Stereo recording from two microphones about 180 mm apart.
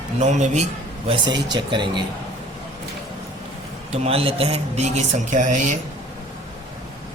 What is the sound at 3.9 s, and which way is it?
Speech, 35° right (ahead or behind).